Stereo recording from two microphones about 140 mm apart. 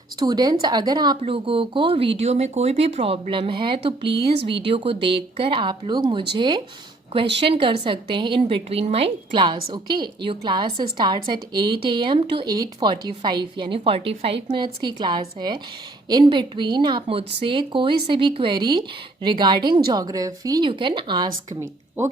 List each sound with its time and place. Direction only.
0.2 s speech: 30° right (ahead or behind)
21.6 s a woman's voice: 20° right (ahead or behind)